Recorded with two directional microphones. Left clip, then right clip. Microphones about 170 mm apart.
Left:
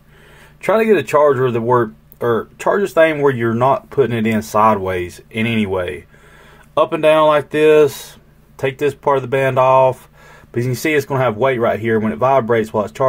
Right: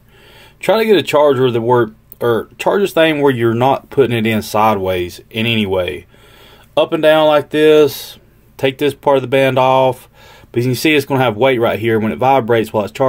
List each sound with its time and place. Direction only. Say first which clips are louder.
0.6 s speech: right 2 dB; 30° right (ahead or behind)